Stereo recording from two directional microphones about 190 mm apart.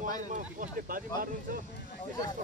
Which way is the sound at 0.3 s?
45° right (ahead or behind).